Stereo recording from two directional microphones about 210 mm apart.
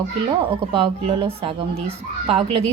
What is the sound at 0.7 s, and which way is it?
A woman's voice, 25° right (ahead or behind).